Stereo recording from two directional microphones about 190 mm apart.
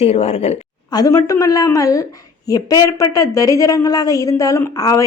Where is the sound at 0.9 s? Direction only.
20° left (ahead or behind).